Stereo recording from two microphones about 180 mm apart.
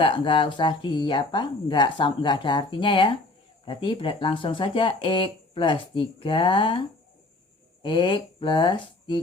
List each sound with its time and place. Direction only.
0.0 s speech: 30° left (ahead or behind)